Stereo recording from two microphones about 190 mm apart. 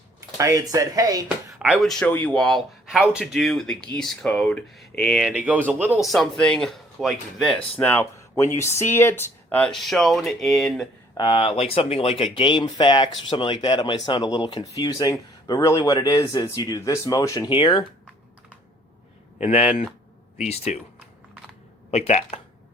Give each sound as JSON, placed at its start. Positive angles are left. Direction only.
{"t": 0.3, "sound": "speech", "side_deg": -15}
{"t": 1.5, "sound": "speech", "side_deg": -5}
{"t": 11.2, "sound": "speech", "side_deg": 25}
{"t": 19.4, "sound": "speech", "side_deg": 35}
{"t": 21.8, "sound": "speech", "side_deg": 35}